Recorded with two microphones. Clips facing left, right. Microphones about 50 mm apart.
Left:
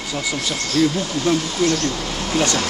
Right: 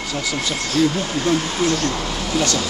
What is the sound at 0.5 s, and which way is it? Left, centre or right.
Speech, centre.